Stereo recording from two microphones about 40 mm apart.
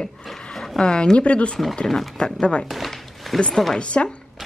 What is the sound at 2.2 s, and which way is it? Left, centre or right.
Speech, left.